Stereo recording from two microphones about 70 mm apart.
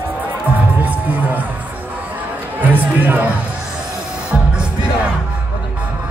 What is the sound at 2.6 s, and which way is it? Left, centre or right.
Music, right.